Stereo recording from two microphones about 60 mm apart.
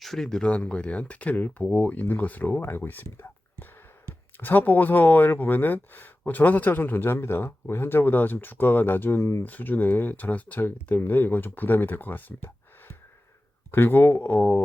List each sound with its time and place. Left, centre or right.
0.0 s speech: centre; by 12.5 s left
13.7 s speech: left